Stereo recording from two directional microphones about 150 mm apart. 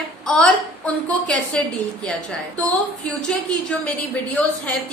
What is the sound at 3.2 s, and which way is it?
A woman's voice, 5° left (ahead or behind).